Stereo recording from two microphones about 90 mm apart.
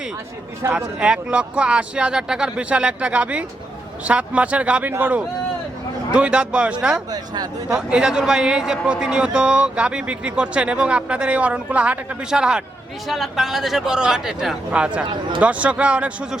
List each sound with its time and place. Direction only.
0.6 s a man's voice: 30° right (ahead or behind)
0.9 s speech: 10° right (ahead or behind)
6.1 s speech: 10° right (ahead or behind)